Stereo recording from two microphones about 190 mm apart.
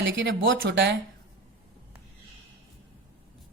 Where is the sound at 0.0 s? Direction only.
70° right (ahead or behind).